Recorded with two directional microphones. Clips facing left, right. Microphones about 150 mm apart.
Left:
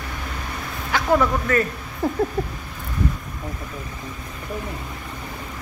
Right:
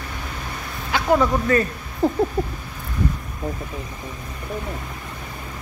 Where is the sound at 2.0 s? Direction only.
15° right (ahead or behind).